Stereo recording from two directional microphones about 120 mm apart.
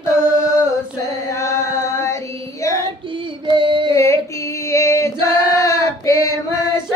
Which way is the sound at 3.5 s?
45° right (ahead or behind).